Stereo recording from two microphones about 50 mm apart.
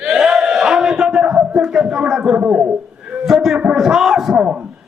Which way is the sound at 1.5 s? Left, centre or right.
Centre.